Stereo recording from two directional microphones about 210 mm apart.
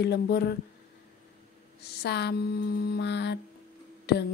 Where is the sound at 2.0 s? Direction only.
50° left (ahead or behind).